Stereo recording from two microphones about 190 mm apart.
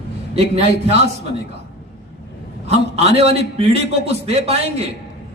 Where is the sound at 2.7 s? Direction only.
35° right (ahead or behind).